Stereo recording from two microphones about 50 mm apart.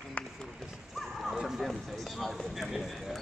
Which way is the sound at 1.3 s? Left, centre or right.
Centre.